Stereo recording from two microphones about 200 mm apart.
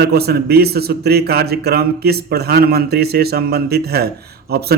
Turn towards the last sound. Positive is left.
turn(degrees=-50)  # may be behind; listen again after turning